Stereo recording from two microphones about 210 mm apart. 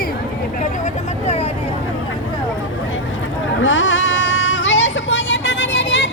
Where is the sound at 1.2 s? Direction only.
30° left (ahead or behind).